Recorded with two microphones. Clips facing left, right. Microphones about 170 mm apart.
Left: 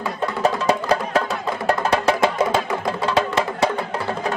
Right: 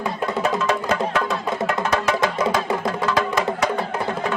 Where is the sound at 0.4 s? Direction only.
35° left (ahead or behind).